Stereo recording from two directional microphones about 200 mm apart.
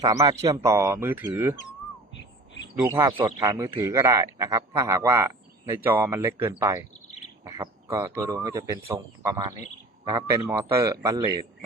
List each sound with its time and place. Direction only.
0.0 s speech: 20° right (ahead or behind)
2.8 s speech: 10° right (ahead or behind)